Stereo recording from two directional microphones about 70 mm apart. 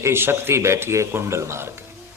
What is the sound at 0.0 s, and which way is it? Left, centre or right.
A man's voice, right.